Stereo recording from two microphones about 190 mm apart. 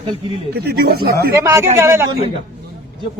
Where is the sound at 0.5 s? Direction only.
55° right (ahead or behind).